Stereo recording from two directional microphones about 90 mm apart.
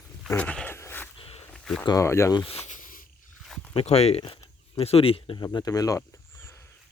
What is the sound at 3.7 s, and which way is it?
Speech, 90° left.